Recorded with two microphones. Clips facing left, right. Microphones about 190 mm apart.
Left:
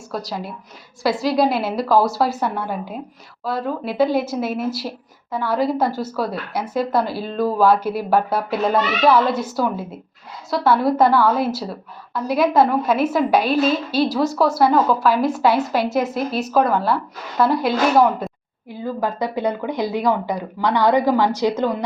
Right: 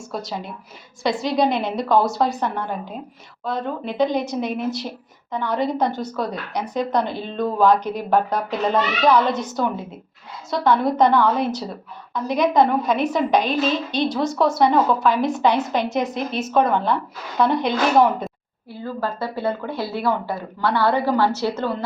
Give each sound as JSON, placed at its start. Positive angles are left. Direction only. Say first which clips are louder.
{"t": 0.3, "sound": "a woman's voice", "louder": "left 2 dB", "side_deg": 0}
{"t": 18.7, "sound": "a woman's voice", "louder": "left 3 dB", "side_deg": 15}